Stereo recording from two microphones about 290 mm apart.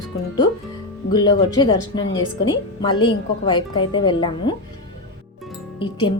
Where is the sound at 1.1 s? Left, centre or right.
Centre.